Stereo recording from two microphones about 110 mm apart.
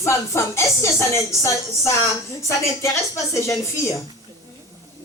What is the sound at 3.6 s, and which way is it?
Speech, 25° left (ahead or behind).